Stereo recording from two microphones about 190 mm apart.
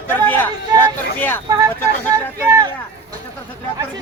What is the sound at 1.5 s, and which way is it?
Speech, 20° right (ahead or behind).